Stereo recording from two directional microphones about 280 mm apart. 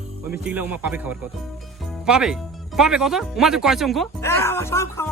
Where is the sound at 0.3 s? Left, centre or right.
Centre.